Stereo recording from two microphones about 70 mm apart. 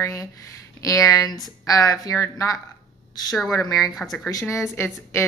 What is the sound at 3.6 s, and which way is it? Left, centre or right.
Speech, left.